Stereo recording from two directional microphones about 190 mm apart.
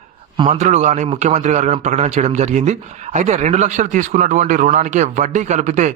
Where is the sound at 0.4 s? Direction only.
35° right (ahead or behind).